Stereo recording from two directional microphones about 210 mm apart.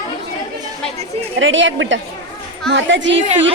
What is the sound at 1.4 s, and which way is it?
Speech, 65° right (ahead or behind).